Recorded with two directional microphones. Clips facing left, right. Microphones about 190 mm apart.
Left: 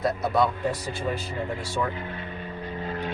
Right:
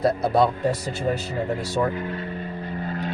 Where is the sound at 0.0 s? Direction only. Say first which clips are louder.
Right 4 dB; 30° right (ahead or behind).